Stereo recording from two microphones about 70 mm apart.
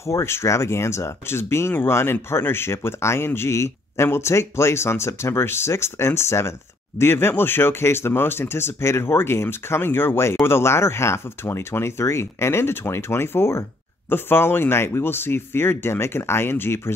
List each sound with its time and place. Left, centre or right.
0.0 s speech: left